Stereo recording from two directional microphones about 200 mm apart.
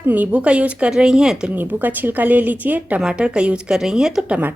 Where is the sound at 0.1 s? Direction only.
5° right (ahead or behind).